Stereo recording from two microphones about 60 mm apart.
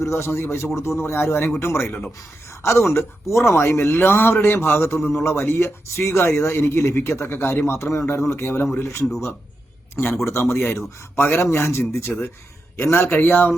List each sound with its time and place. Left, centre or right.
0.0 s speech: left
2.9 s speech: left
10.2 s speech: left
12.1 s speech: centre
12.7 s speech: left